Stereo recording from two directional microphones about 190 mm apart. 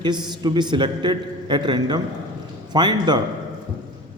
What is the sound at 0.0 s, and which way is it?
A man's voice, 25° right (ahead or behind).